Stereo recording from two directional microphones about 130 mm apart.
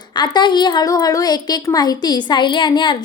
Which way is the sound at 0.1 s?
35° left (ahead or behind).